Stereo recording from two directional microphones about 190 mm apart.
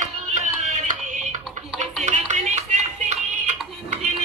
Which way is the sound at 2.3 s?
40° right (ahead or behind).